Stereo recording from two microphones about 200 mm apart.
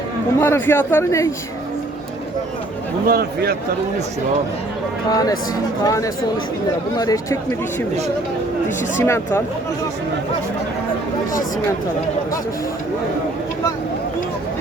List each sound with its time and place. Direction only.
0.3 s a man's voice: 10° left (ahead or behind)
3.1 s speech: 50° right (ahead or behind)
5.1 s a man's voice: 20° left (ahead or behind)
9.0 s a man's voice: 10° left (ahead or behind)